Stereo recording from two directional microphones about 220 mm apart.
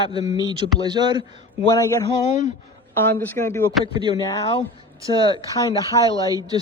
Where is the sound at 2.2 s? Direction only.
35° left (ahead or behind).